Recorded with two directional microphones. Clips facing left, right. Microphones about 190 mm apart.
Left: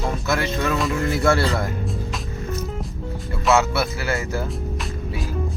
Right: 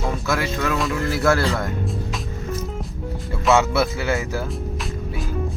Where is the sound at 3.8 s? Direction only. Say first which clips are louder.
Right 3 dB; 20° right (ahead or behind).